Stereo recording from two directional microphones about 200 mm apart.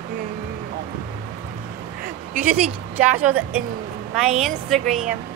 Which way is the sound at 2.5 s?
5° right (ahead or behind).